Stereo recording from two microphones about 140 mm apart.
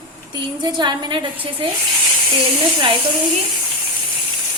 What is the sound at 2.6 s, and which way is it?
Speech, 40° right (ahead or behind).